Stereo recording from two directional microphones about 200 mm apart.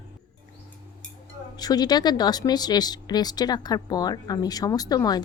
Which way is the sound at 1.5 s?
20° left (ahead or behind).